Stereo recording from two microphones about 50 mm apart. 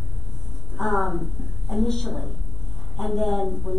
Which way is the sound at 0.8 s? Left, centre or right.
Centre.